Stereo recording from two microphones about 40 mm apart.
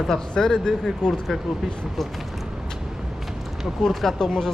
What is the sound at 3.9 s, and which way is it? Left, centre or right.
Speech, centre.